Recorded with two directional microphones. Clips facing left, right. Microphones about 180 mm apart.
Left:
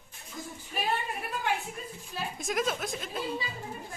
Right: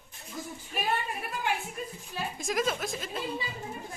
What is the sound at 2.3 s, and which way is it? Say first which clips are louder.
Speech: right 1 dB; centre (ahead or behind).